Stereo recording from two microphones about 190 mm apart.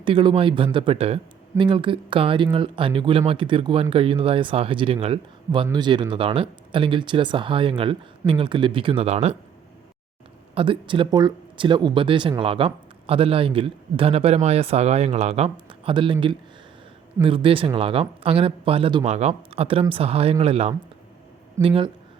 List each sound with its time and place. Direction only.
0.0 s a man's voice: 25° right (ahead or behind)
10.5 s a man's voice: 30° right (ahead or behind)
17.2 s a man's voice: 30° right (ahead or behind)